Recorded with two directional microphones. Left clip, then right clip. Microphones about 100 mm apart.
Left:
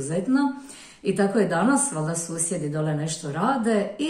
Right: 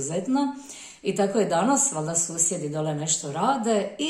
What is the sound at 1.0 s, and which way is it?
Speech, 15° right (ahead or behind).